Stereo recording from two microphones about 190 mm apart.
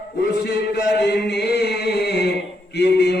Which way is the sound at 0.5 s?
60° left (ahead or behind).